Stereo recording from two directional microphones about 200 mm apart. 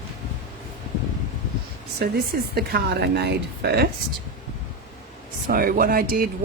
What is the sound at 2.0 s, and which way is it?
Speech, 50° right (ahead or behind).